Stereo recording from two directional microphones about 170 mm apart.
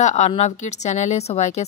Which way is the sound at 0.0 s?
40° left (ahead or behind).